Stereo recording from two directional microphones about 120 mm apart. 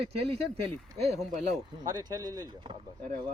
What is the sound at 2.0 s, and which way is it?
Speech, 30° right (ahead or behind).